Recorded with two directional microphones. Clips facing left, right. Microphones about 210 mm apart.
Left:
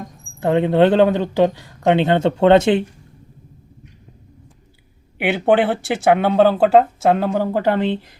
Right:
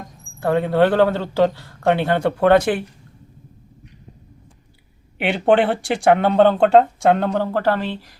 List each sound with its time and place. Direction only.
0.3 s a man's voice: 20° left (ahead or behind)
5.2 s speech: 5° left (ahead or behind); by 8.1 s 20° left (ahead or behind)